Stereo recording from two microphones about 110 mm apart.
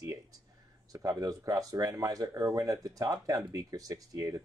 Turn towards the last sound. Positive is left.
turn(degrees=-30)  # may be behind; listen again after turning